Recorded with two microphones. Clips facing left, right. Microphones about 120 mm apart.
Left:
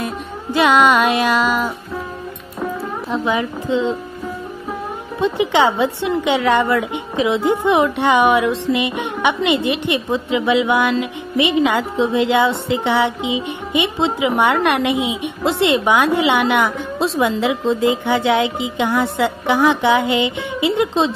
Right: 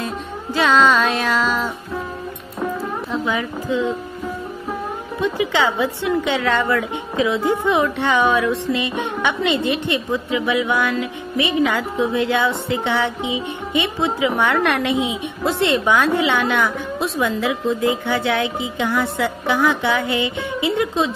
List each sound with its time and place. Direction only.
0.0 s music: 15° left (ahead or behind)
3.1 s a woman's voice: 20° left (ahead or behind)
5.2 s a woman's voice: 20° left (ahead or behind)